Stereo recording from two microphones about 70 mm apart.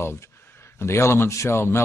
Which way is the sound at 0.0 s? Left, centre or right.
Left.